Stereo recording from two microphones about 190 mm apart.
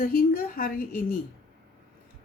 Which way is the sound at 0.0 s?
50° left (ahead or behind).